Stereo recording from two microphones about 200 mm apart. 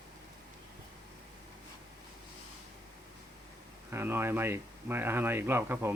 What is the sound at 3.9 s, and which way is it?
Speech, 10° right (ahead or behind).